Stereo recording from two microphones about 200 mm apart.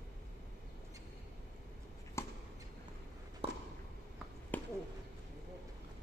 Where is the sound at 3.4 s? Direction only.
30° right (ahead or behind).